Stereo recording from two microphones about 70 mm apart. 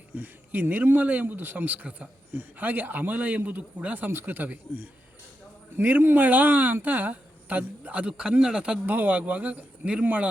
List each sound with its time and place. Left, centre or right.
0.1 s speech: right; by 8.8 s centre
8.9 s speech: right